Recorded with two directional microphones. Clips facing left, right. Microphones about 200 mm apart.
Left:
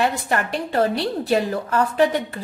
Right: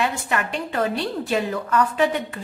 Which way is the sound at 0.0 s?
35° left (ahead or behind).